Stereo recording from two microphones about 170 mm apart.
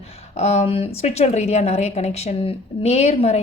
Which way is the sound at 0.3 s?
40° left (ahead or behind).